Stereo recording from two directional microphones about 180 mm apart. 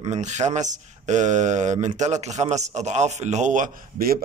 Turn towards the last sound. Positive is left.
turn(degrees=-50)  # may be behind; listen again after turning